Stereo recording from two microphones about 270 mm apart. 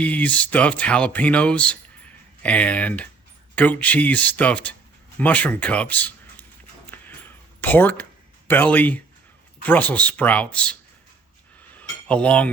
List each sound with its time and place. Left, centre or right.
0.0 s speech: centre
7.6 s speech: centre
11.8 s cutlery: centre